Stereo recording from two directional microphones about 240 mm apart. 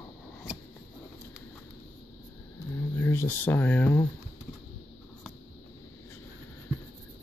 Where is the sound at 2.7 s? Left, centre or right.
Centre.